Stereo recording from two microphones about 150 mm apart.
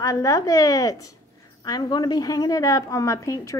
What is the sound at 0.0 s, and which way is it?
A woman's voice, 20° left (ahead or behind).